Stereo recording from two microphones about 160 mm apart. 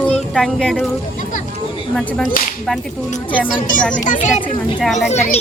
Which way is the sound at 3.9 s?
50° left (ahead or behind).